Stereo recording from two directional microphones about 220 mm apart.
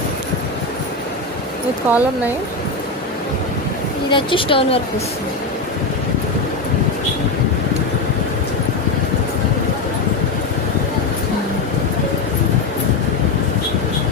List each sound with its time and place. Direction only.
1.9 s speech: 10° right (ahead or behind)
4.1 s speech: 25° left (ahead or behind)